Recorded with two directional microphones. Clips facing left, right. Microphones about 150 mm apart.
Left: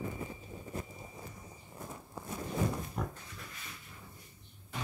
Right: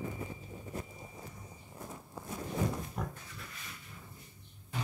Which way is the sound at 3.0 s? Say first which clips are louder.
Left 2 dB; centre (ahead or behind).